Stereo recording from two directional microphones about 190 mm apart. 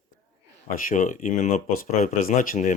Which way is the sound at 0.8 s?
45° left (ahead or behind).